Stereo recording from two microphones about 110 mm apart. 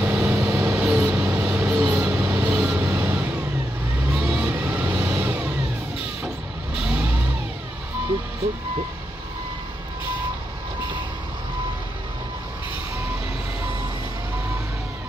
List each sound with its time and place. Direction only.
0.0 s vehicle: 15° right (ahead or behind)
0.5 s vehicle: 30° right (ahead or behind)
0.7 s vehicle: 10° right (ahead or behind)
1.5 s music: 10° right (ahead or behind)
2.5 s vehicle: 10° right (ahead or behind)
6.7 s vehicle: 5° right (ahead or behind)